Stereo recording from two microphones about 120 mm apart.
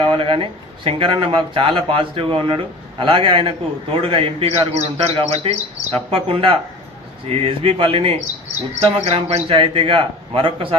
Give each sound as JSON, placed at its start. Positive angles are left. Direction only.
{"t": 0.0, "sound": "a man's voice", "side_deg": -45}